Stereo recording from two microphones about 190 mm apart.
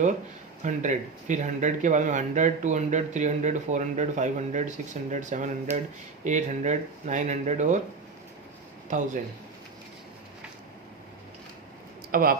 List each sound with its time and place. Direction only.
0.6 s speech: 40° right (ahead or behind)
8.9 s speech: 40° right (ahead or behind)
12.1 s speech: 50° right (ahead or behind)